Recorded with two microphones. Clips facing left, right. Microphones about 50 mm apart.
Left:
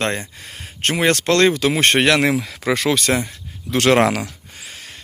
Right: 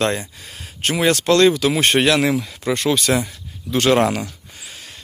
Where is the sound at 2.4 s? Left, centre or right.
Left.